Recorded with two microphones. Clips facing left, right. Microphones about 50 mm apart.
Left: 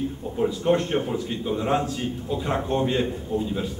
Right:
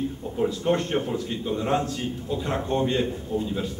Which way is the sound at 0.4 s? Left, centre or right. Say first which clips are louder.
Left 2 dB; centre.